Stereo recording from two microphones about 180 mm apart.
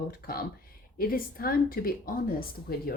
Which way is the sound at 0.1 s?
55° left (ahead or behind).